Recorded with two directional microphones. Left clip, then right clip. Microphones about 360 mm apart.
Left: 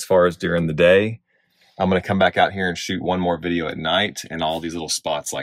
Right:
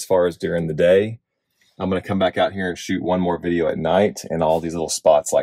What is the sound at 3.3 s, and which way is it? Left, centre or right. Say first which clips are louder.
Speech: right 2 dB; centre.